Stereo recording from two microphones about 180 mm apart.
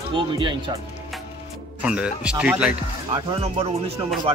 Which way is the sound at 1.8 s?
5° right (ahead or behind).